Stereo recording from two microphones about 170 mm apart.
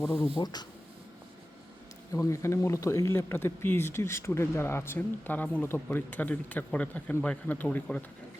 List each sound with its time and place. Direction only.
0.0 s speech: 15° left (ahead or behind)
2.1 s speech: 15° left (ahead or behind)